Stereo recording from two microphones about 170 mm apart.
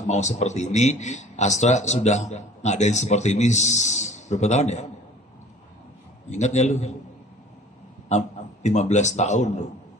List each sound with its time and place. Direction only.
0.0 s a man's voice: 45° left (ahead or behind)
6.3 s a man's voice: 45° left (ahead or behind)
8.1 s a man's voice: 45° left (ahead or behind)